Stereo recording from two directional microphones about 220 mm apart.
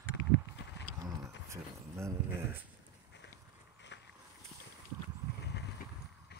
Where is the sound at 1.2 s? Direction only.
15° right (ahead or behind).